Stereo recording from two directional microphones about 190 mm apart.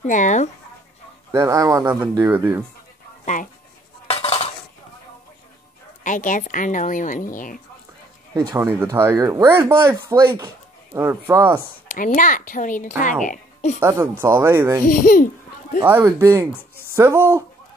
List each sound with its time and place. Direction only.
0.0 s speech: 40° left (ahead or behind)
1.3 s speech: 15° right (ahead or behind)
4.1 s cutlery: 30° left (ahead or behind)
6.0 s speech: 45° left (ahead or behind)
8.4 s speech: 20° right (ahead or behind)
11.6 s speech: 45° left (ahead or behind)
13.7 s speech: 15° right (ahead or behind)
14.9 s speech: 45° left (ahead or behind)
15.8 s speech: 10° right (ahead or behind)